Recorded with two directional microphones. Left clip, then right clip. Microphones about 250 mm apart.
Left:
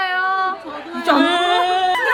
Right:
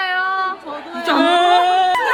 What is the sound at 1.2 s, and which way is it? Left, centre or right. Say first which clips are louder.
Dog: right 6 dB; right.